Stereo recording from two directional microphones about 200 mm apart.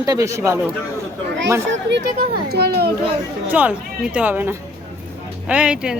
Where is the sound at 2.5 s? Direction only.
50° right (ahead or behind).